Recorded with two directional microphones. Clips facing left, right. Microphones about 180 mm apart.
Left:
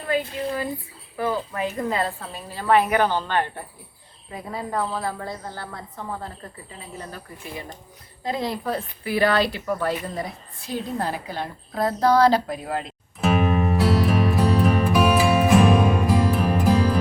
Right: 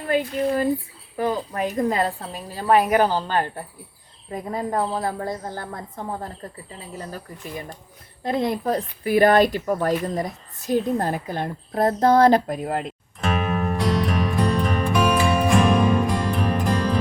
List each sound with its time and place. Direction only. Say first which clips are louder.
0.1 s a woman's voice: right 4 dB; 40° right (ahead or behind)
8.2 s speech: right 4 dB; 50° right (ahead or behind)
13.2 s music: left 3 dB; centre (ahead or behind)